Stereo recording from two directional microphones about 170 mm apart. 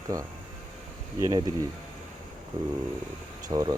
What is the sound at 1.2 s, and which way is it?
Speech, 20° right (ahead or behind).